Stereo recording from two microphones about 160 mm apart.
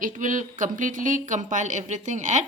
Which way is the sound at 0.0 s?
55° right (ahead or behind).